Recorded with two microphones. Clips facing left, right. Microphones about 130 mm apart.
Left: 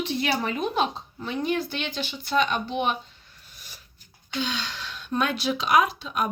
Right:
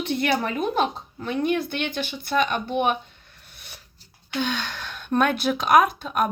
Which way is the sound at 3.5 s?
60° right (ahead or behind).